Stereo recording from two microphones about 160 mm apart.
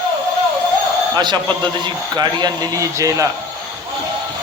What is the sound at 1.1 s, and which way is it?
Speech, 30° right (ahead or behind).